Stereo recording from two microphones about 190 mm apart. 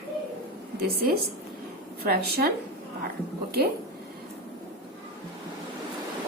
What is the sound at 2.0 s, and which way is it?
Speech, 55° right (ahead or behind).